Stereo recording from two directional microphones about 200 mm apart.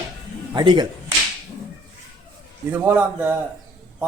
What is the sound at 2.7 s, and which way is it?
Speech, 10° right (ahead or behind).